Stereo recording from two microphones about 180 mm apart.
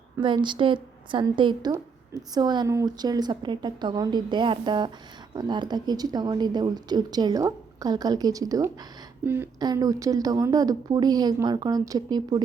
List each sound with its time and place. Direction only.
0.2 s speech: 25° right (ahead or behind)